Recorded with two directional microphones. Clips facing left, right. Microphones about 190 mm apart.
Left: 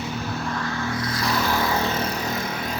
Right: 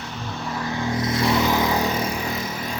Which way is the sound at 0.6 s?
20° right (ahead or behind).